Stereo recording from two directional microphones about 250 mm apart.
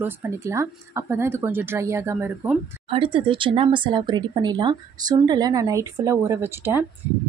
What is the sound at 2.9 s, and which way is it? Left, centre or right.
A woman's voice, right.